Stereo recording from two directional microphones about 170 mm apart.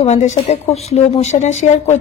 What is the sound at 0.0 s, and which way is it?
A woman's voice, 40° left (ahead or behind).